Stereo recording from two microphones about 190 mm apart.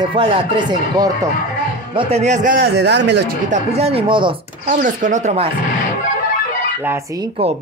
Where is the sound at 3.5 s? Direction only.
35° right (ahead or behind).